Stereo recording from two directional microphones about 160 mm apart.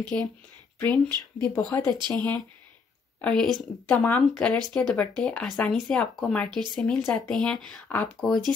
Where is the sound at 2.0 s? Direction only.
25° right (ahead or behind).